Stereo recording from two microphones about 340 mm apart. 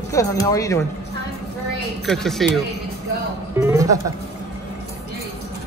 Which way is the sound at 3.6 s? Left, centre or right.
Centre.